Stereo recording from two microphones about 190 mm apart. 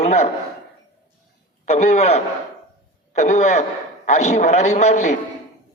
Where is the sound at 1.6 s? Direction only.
35° left (ahead or behind).